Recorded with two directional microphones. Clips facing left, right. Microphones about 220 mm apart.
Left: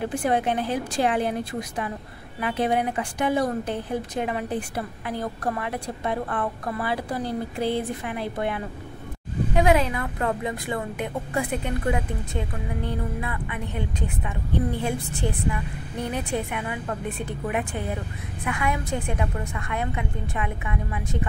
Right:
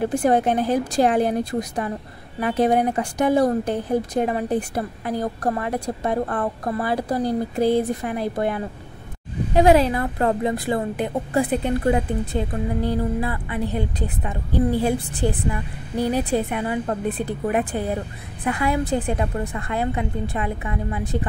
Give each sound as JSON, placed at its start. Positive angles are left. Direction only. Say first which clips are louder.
{"t": 0.0, "sound": "a woman's voice", "louder": "right 5 dB", "side_deg": -40}